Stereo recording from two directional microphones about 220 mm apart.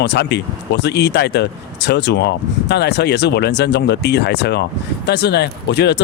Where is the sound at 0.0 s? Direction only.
50° left (ahead or behind).